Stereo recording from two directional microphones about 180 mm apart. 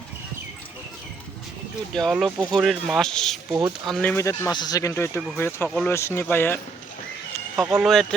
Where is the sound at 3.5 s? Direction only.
20° right (ahead or behind).